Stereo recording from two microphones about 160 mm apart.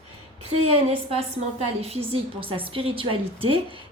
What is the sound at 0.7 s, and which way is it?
Speech, 40° right (ahead or behind).